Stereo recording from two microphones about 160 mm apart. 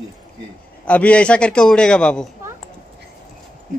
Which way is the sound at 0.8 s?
10° left (ahead or behind).